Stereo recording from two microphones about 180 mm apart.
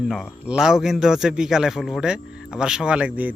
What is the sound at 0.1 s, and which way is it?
A man's voice, 5° right (ahead or behind).